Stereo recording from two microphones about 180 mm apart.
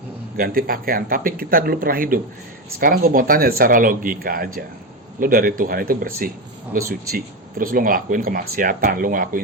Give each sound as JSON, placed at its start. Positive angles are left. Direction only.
{"t": 0.3, "sound": "speech", "side_deg": -55}